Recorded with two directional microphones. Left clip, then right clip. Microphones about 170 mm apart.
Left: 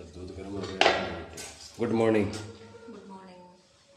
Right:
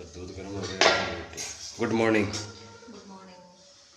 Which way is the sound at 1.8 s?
15° left (ahead or behind).